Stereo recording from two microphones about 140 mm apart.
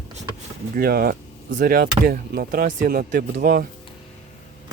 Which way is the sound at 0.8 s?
90° right.